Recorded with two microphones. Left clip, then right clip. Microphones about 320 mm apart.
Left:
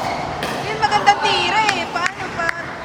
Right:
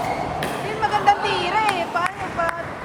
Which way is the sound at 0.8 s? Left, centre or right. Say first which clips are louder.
Left 3 dB; centre.